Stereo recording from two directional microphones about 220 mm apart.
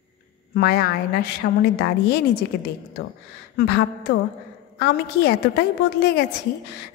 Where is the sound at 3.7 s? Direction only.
50° left (ahead or behind).